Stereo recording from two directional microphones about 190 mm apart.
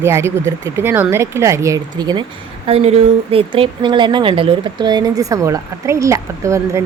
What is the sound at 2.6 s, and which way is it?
Speech, 35° right (ahead or behind).